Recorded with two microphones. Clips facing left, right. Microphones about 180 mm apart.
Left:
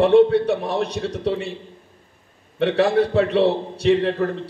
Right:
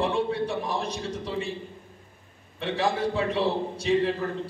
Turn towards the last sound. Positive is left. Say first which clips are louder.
# left 6 dB
turn(degrees=65)  # may be behind; listen again after turning